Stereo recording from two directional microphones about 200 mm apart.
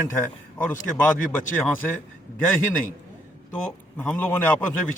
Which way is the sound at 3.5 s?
5° left (ahead or behind).